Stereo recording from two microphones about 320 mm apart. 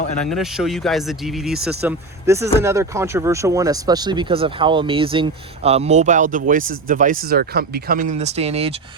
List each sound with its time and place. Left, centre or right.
0.3 s speech: centre